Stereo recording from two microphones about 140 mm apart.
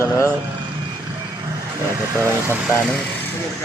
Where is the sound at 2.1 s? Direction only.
20° right (ahead or behind).